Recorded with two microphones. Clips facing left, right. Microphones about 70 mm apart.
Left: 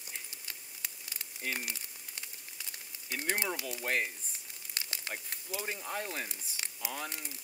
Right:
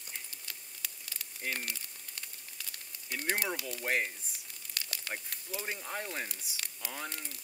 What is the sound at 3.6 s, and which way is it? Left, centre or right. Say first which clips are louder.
Speech: left 1 dB; centre.